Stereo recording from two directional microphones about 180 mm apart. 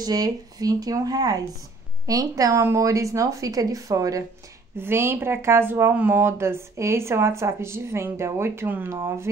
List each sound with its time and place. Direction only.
0.0 s a woman's voice: 20° right (ahead or behind)